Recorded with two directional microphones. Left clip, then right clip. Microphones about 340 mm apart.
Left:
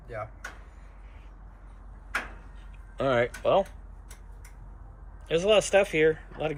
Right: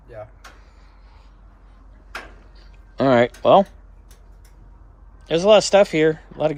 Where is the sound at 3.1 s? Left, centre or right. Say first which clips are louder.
Right 10 dB; centre.